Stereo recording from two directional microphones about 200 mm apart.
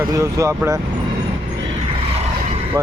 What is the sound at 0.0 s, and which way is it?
Speech, 15° right (ahead or behind).